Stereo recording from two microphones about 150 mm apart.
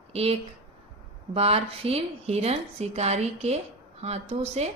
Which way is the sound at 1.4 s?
40° right (ahead or behind).